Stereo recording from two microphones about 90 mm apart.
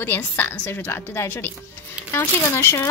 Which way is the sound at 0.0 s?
25° left (ahead or behind).